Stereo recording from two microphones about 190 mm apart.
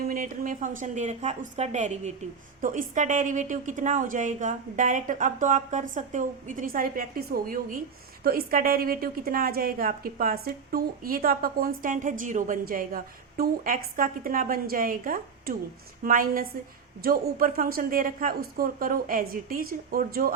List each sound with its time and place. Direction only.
0.0 s a woman's voice: 45° right (ahead or behind)